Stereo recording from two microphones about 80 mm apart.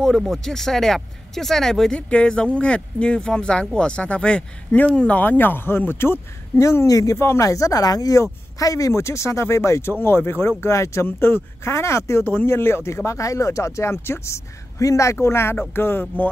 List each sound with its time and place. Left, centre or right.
0.0 s speech: centre; by 12.3 s left
12.3 s speech: left